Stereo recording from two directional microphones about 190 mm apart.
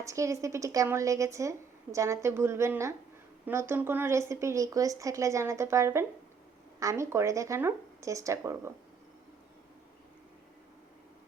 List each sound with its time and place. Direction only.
0.0 s speech: 15° right (ahead or behind)